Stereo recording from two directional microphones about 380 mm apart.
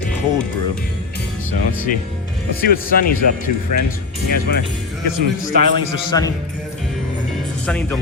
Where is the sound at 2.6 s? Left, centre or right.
Left.